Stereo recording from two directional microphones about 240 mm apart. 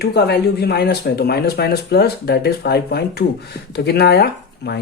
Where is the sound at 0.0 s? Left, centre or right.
Left.